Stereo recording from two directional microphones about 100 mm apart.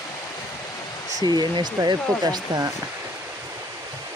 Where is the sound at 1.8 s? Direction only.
40° right (ahead or behind).